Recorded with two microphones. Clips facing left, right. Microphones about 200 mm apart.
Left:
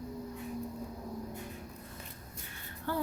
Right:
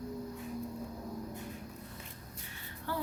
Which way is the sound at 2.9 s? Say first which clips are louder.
Left 3 dB; 50° left (ahead or behind).